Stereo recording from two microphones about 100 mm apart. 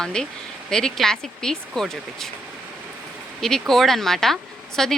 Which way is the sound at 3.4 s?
5° left (ahead or behind).